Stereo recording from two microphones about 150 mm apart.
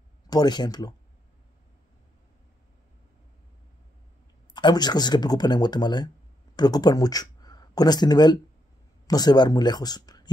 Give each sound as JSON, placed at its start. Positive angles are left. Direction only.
{"t": 0.3, "sound": "speech", "side_deg": 25}
{"t": 4.6, "sound": "speech", "side_deg": 30}